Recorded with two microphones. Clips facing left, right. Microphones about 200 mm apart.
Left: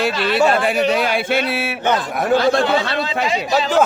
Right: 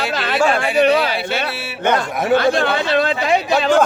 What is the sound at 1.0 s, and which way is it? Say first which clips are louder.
Speech: left 2 dB; 50° left (ahead or behind).